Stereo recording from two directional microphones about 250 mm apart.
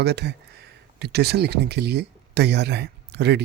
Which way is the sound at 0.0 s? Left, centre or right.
Right.